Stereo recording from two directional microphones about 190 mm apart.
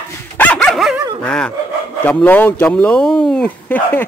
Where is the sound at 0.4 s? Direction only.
5° left (ahead or behind).